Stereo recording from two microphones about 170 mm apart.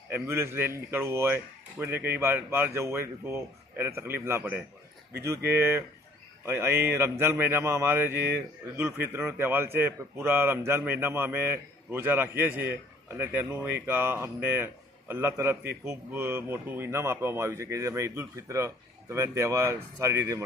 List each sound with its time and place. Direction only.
0.1 s speech: 15° right (ahead or behind)